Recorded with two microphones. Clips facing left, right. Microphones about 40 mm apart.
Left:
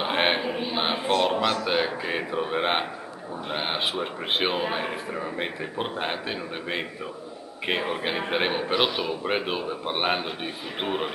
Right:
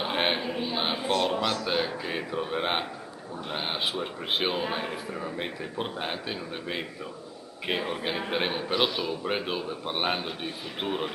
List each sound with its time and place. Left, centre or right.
0.0 s a man's voice: centre